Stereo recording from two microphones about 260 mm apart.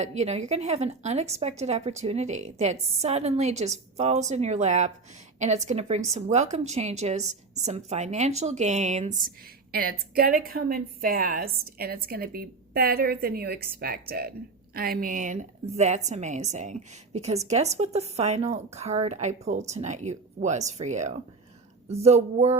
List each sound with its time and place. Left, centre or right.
0.0 s a woman's voice: right